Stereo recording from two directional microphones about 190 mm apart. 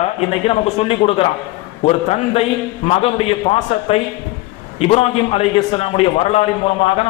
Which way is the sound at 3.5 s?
35° left (ahead or behind).